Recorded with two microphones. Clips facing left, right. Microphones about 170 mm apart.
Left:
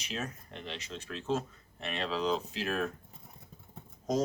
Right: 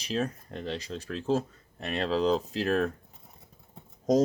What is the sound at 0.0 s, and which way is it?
Speech, 35° right (ahead or behind).